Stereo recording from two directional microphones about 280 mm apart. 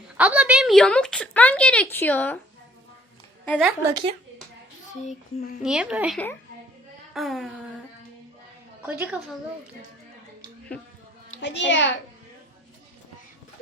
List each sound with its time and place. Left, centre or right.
0.2 s a woman's voice: centre
3.4 s a woman's voice: centre
3.8 s speech: centre
5.6 s a woman's voice: centre
8.8 s a woman's voice: centre
11.3 s a child's voice: left